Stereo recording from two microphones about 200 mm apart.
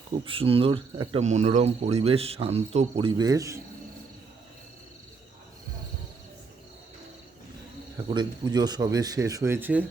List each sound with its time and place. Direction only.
0.3 s speech: 25° right (ahead or behind)
8.0 s speech: 20° right (ahead or behind)